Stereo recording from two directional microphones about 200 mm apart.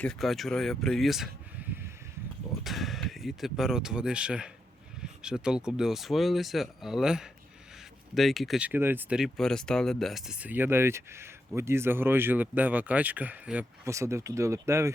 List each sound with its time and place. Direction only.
0.0 s speech: centre (ahead or behind)
2.5 s speech: centre (ahead or behind)